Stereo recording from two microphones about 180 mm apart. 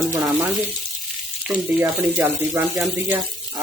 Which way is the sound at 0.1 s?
15° right (ahead or behind).